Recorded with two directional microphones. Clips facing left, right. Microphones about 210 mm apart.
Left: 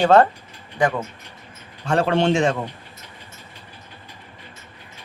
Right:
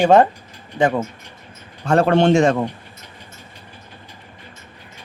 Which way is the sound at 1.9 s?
50° right (ahead or behind).